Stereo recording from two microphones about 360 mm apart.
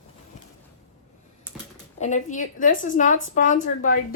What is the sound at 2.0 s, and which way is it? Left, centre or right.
A woman's voice, centre.